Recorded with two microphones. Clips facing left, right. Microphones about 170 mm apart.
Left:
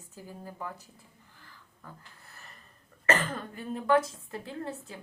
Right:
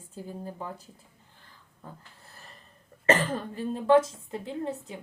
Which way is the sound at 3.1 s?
30° right (ahead or behind).